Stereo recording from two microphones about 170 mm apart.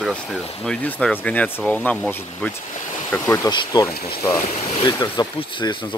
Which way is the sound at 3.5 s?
25° left (ahead or behind).